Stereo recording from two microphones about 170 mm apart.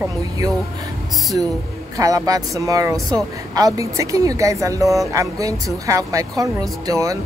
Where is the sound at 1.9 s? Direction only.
20° right (ahead or behind).